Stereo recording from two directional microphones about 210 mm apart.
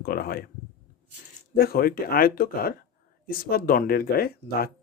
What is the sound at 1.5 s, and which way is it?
Speech, 45° left (ahead or behind).